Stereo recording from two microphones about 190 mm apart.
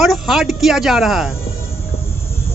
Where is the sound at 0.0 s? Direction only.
Centre (ahead or behind).